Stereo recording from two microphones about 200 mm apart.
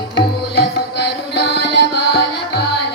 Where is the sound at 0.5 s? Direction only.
55° left (ahead or behind).